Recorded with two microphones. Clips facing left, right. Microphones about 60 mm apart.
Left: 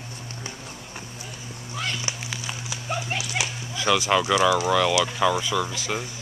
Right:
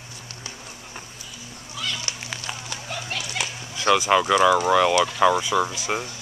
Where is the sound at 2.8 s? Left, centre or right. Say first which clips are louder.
Left 4 dB; centre.